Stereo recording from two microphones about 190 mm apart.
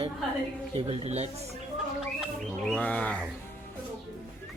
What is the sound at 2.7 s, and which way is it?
Speech, 5° left (ahead or behind).